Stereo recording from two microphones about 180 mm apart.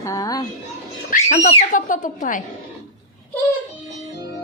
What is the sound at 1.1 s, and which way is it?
Speech, 35° left (ahead or behind).